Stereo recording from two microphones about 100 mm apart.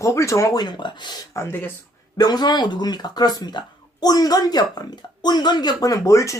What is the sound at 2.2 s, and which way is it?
Speech, 45° left (ahead or behind).